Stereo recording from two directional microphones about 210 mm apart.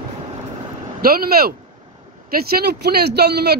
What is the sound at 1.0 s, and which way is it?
Speech, 45° right (ahead or behind).